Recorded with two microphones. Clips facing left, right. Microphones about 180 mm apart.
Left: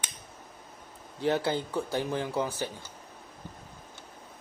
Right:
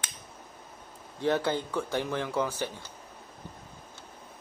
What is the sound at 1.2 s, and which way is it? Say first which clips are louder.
Speech: even; 15° left (ahead or behind).